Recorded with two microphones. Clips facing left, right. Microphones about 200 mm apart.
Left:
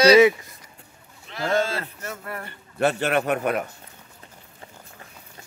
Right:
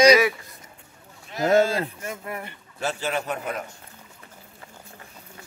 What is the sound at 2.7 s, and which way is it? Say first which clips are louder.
Speech: left 6 dB; 60° left (ahead or behind).